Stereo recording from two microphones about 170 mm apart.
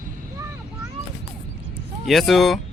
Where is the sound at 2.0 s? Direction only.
Centre (ahead or behind).